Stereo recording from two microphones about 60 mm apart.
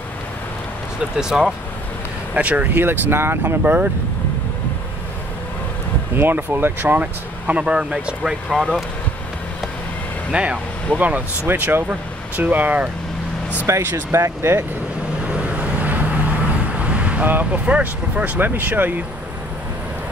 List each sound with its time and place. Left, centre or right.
1.1 s speech: centre
2.3 s speech: right
2.8 s speech: right
3.6 s speech: right
6.1 s speech: right; by 8.4 s centre
10.3 s speech: centre
11.4 s speech: right
13.7 s speech: right
15.3 s vehicle: right